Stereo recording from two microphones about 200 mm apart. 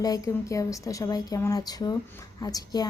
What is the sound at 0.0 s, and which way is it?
A woman's voice, 15° left (ahead or behind).